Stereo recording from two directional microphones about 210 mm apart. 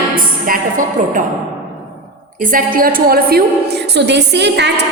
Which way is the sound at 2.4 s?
40° right (ahead or behind).